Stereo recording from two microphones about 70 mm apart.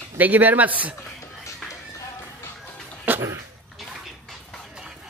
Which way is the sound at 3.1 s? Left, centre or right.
Right.